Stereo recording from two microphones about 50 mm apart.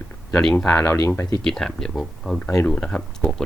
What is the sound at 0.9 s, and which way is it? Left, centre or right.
Speech, left.